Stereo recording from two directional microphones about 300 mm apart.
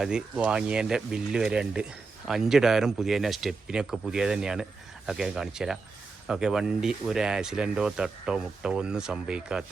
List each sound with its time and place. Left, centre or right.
0.0 s speech: centre